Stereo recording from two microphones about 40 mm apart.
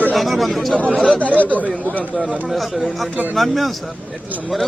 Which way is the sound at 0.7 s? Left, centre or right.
Right.